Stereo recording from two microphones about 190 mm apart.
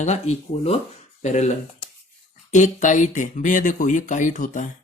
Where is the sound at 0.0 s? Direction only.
35° left (ahead or behind).